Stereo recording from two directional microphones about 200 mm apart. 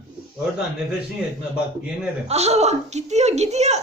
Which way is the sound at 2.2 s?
35° right (ahead or behind).